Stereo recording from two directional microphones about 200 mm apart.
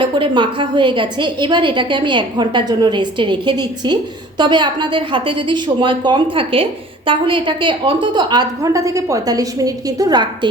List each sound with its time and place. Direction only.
0.0 s a woman's voice: 25° right (ahead or behind)